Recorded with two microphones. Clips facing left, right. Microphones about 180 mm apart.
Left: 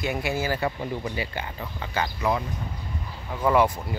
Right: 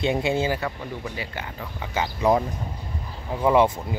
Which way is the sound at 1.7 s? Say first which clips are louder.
Right 1 dB; 10° right (ahead or behind).